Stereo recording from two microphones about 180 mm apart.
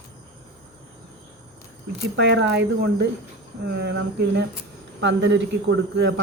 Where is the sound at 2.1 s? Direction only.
75° right (ahead or behind).